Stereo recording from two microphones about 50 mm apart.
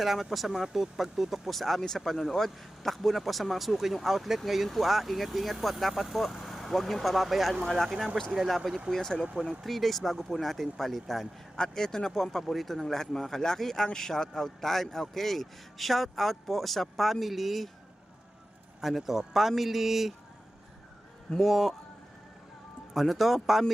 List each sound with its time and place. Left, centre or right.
0.0 s speech: centre
8.9 s speech: centre
9.2 s speech: right
9.5 s speech: centre
11.5 s speech: centre
18.8 s speech: centre
21.3 s speech: centre
23.0 s speech: centre